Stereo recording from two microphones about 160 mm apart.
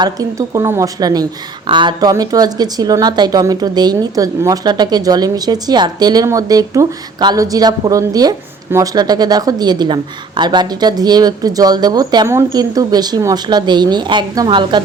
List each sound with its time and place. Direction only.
0.0 s speech: 20° right (ahead or behind)